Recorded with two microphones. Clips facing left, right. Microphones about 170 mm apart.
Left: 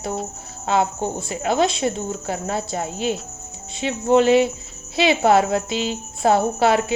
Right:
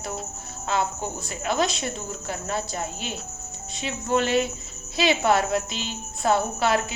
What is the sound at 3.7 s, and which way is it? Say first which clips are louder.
A woman's voice: left 8 dB; 25° left (ahead or behind).